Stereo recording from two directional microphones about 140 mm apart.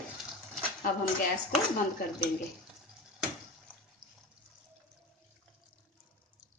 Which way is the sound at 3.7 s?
10° right (ahead or behind).